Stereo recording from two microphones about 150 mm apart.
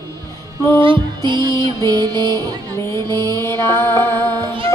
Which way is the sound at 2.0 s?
30° right (ahead or behind).